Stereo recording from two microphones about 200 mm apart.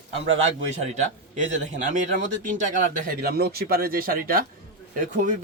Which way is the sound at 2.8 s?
40° right (ahead or behind).